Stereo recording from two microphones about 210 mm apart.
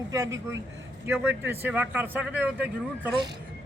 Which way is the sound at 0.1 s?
15° right (ahead or behind).